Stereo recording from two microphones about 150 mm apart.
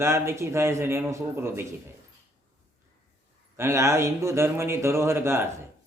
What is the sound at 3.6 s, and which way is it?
Speech, 20° right (ahead or behind).